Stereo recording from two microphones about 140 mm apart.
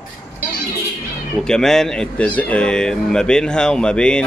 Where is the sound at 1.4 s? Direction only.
5° left (ahead or behind).